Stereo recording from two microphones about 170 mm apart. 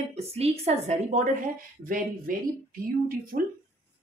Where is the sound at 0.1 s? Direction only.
35° right (ahead or behind).